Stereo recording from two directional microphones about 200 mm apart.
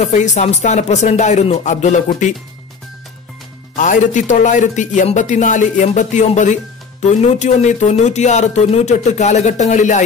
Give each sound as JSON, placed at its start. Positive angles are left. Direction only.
{"t": 0.0, "sound": "a man's voice", "side_deg": 35}
{"t": 3.7, "sound": "a man's voice", "side_deg": 40}